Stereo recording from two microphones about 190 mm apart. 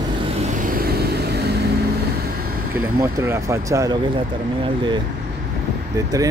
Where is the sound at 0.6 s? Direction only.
50° right (ahead or behind).